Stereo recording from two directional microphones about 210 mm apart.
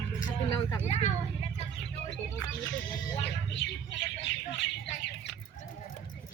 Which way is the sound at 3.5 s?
55° left (ahead or behind).